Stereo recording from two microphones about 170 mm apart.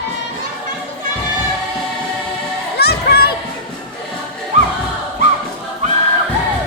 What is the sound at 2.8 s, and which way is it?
Music, 70° left (ahead or behind).